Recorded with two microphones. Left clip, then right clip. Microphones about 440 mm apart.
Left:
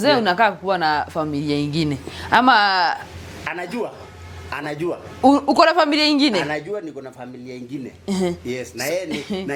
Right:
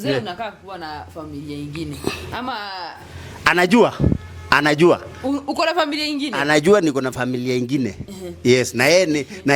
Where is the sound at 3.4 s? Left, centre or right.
Right.